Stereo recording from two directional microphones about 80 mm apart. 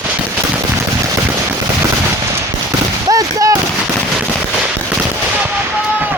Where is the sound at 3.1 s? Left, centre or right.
Right.